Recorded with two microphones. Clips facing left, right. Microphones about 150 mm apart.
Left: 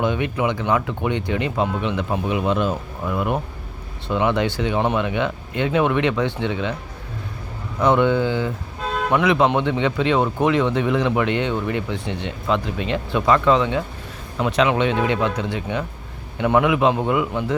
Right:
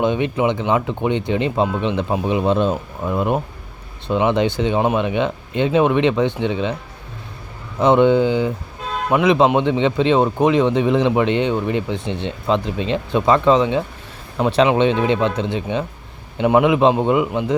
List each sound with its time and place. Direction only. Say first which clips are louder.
0.0 s speech: right 3 dB; 20° right (ahead or behind)
7.8 s speech: right 4 dB; 20° right (ahead or behind)